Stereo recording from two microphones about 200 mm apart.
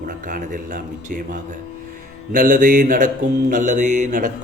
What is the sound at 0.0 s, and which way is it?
A man's voice, 45° right (ahead or behind).